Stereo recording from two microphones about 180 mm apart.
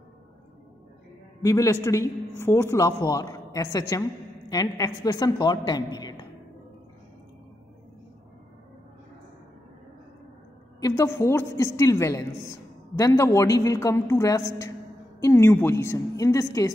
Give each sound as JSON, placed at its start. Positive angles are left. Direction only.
{"t": 1.4, "sound": "a woman's voice", "side_deg": 20}
{"t": 10.8, "sound": "a woman's voice", "side_deg": 15}